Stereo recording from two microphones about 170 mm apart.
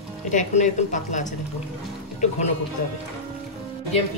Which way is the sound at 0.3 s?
45° left (ahead or behind).